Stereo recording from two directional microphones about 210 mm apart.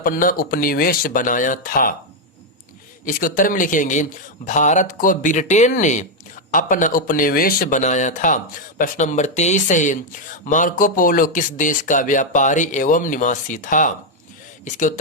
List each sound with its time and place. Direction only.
0.0 s speech: 40° left (ahead or behind)
3.1 s speech: 40° left (ahead or behind)